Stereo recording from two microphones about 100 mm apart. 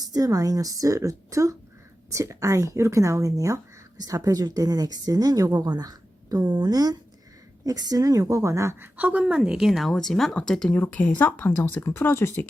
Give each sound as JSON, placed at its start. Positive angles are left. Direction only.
{"t": 0.0, "sound": "speech", "side_deg": -40}
{"t": 9.0, "sound": "speech", "side_deg": -15}